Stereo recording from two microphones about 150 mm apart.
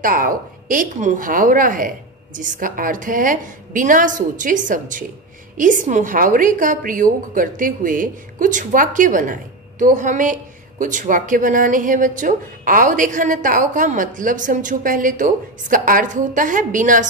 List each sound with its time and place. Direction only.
0.0 s a woman's voice: 65° right (ahead or behind)